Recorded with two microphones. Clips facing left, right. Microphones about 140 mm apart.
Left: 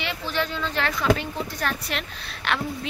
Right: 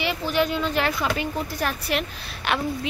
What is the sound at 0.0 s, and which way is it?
Speech, 15° right (ahead or behind).